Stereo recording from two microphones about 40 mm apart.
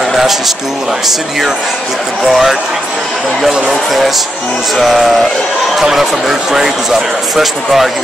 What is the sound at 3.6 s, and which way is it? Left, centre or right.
Speech, centre.